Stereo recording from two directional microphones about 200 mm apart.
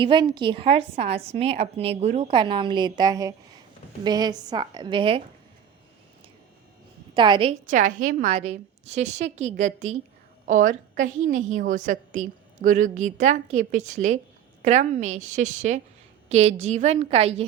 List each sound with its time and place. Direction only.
0.0 s a woman's voice: 25° right (ahead or behind)
7.1 s a woman's voice: 25° right (ahead or behind)
7.7 s a woman's voice: 40° right (ahead or behind)